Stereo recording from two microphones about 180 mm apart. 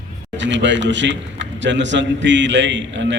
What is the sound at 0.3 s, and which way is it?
A man's voice, 90° right.